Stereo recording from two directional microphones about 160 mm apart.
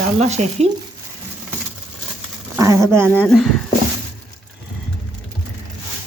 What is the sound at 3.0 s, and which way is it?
Speech, 10° left (ahead or behind).